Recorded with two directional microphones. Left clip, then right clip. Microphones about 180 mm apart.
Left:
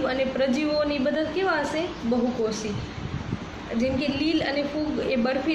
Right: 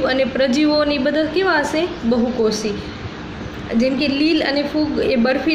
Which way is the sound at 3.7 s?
55° right (ahead or behind).